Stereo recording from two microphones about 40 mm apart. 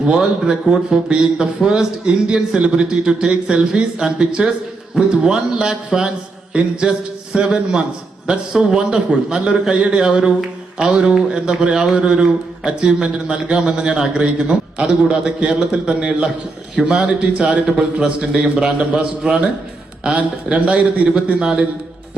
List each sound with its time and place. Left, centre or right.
0.0 s a man's voice: right
5.5 s a man's voice: centre
6.5 s a man's voice: right
7.3 s a man's voice: centre
17.7 s speech: centre
18.3 s a man's voice: right
19.2 s speech: centre
20.1 s a man's voice: right
21.4 s a man's voice: right